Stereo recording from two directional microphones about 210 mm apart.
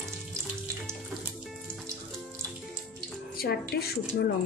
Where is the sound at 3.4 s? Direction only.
50° left (ahead or behind).